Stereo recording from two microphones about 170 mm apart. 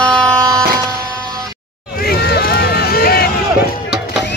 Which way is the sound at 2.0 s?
70° left (ahead or behind).